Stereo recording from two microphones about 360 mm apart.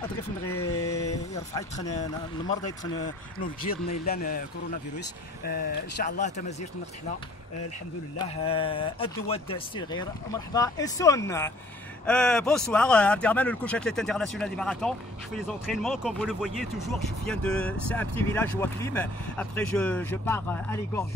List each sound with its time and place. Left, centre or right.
0.0 s speech: centre
3.3 s speech: left
5.4 s speech: left
8.2 s speech: centre